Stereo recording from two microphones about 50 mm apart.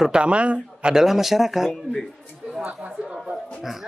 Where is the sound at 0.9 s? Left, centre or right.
Centre.